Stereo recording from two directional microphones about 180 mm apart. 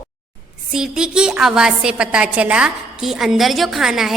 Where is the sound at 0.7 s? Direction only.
5° right (ahead or behind).